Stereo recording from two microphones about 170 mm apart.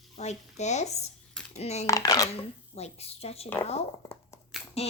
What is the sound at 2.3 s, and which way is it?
Speech, 40° left (ahead or behind).